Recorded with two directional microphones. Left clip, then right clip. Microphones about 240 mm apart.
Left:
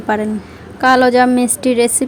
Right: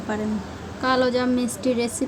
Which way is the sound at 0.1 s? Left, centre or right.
Left.